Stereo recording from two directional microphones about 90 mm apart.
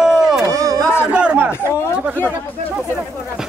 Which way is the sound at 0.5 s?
40° right (ahead or behind).